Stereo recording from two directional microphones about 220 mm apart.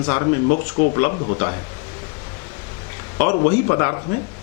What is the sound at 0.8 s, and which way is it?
Speech, 45° left (ahead or behind).